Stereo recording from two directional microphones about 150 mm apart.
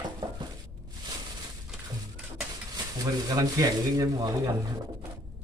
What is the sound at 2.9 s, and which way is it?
Speech, 25° right (ahead or behind).